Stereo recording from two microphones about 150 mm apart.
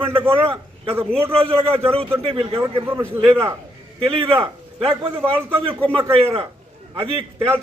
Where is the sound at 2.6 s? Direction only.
15° right (ahead or behind).